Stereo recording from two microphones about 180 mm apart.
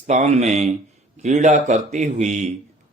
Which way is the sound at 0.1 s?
40° right (ahead or behind).